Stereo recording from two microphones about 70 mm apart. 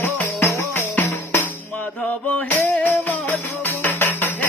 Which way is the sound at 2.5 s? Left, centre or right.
Left.